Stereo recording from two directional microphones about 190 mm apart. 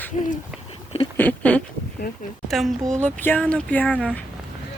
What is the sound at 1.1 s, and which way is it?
Speech, 10° left (ahead or behind).